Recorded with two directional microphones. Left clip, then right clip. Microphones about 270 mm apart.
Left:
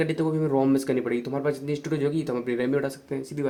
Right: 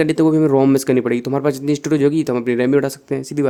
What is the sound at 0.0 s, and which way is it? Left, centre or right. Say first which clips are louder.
Speech: right 11 dB; right.